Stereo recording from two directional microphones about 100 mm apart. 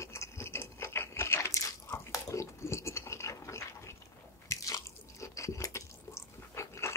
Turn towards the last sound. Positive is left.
turn(degrees=30)  # may be behind; listen again after turning